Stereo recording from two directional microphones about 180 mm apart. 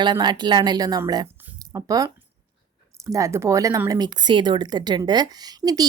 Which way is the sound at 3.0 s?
15° right (ahead or behind).